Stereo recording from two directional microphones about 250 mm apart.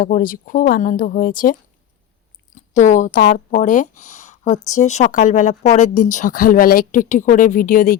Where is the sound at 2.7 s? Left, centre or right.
Left.